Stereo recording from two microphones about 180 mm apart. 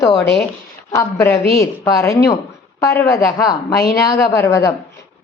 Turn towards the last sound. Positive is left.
turn(degrees=15)  # may be behind; listen again after turning